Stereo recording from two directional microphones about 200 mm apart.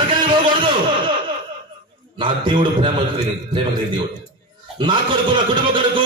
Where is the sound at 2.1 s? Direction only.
25° right (ahead or behind).